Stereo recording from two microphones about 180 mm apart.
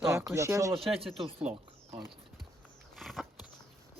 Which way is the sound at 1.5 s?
30° right (ahead or behind).